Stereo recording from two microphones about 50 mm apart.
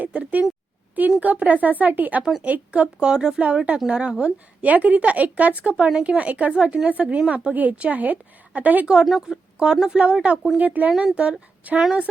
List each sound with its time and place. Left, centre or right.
0.0 s a sound: right
1.2 s speech: right
9.0 s speech: centre; by 11.8 s right